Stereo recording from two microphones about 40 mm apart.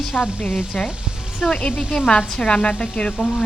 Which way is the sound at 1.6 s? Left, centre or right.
Left.